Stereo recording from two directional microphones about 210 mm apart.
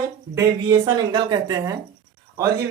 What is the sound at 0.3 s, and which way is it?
A woman's voice, 15° right (ahead or behind).